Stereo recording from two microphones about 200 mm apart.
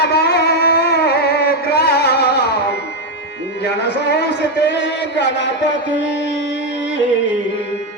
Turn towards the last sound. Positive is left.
turn(degrees=65)  # may be behind; listen again after turning